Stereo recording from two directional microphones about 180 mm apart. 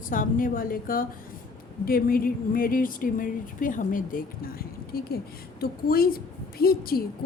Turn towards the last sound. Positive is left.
turn(degrees=55)  # may be behind; listen again after turning